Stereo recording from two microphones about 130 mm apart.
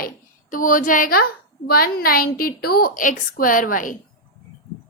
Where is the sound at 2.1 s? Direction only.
90° left.